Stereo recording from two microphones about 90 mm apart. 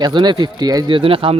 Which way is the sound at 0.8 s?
75° right (ahead or behind).